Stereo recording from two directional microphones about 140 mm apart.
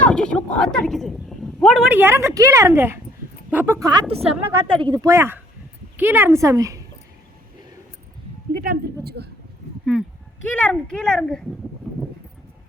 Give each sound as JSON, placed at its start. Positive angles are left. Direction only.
{"t": 0.0, "sound": "speech", "side_deg": 5}
{"t": 1.9, "sound": "a woman's voice", "side_deg": -15}
{"t": 3.8, "sound": "a woman's voice", "side_deg": -30}
{"t": 4.1, "sound": "a woman's voice", "side_deg": -45}
{"t": 4.9, "sound": "a woman's voice", "side_deg": -20}
{"t": 8.5, "sound": "speech", "side_deg": -90}
{"t": 10.4, "sound": "speech", "side_deg": 10}